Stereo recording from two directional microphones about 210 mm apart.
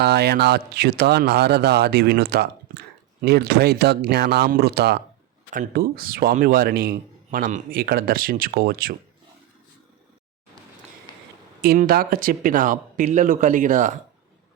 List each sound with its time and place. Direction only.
0.0 s speech: 50° right (ahead or behind)
11.1 s a sound: 20° left (ahead or behind)
11.6 s speech: 45° right (ahead or behind)